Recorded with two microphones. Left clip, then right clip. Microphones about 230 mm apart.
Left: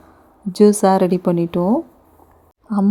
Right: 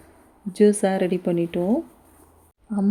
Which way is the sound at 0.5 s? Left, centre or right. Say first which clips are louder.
Left 6 dB; left.